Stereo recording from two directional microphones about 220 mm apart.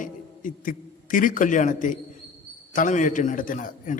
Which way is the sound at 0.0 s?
40° left (ahead or behind).